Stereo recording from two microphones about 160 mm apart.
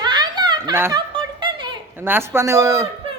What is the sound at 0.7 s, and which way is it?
Speech, 15° right (ahead or behind).